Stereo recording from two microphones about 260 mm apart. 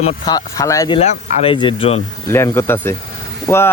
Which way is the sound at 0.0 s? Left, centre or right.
Centre.